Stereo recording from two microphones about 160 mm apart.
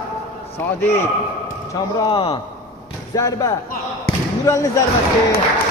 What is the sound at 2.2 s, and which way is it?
Speech, 35° left (ahead or behind).